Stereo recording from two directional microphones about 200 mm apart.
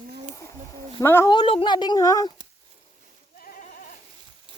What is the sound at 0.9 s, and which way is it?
Speech, 15° left (ahead or behind).